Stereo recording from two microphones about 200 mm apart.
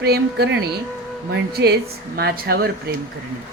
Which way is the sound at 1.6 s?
60° right (ahead or behind).